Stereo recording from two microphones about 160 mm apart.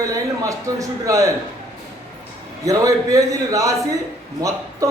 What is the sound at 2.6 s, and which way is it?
A man's voice, 20° right (ahead or behind).